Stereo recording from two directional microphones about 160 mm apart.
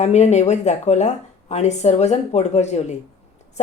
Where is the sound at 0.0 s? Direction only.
45° left (ahead or behind).